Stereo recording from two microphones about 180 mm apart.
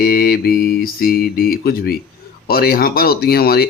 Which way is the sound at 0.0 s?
60° left (ahead or behind).